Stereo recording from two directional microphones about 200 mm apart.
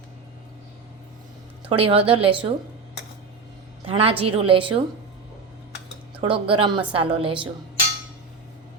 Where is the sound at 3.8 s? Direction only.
25° right (ahead or behind).